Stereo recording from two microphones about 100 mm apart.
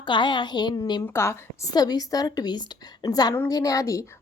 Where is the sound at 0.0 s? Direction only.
50° left (ahead or behind).